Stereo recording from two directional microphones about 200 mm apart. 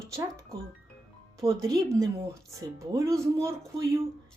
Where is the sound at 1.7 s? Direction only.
15° right (ahead or behind).